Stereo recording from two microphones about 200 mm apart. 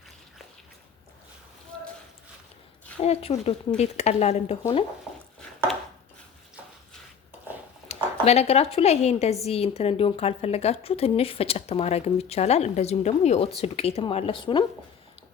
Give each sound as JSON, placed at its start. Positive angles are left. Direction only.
{"t": 3.0, "sound": "speech", "side_deg": 30}
{"t": 7.9, "sound": "speech", "side_deg": 30}